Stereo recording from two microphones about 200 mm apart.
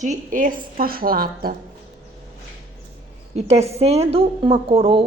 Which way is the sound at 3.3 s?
30° right (ahead or behind).